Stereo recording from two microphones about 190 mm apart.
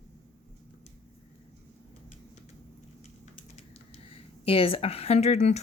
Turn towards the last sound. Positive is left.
turn(degrees=35)  # may be behind; listen again after turning